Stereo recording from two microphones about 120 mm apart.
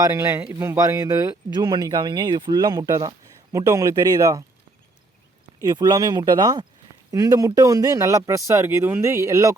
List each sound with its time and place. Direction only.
0.0 s speech: 25° right (ahead or behind)
5.6 s speech: 35° right (ahead or behind)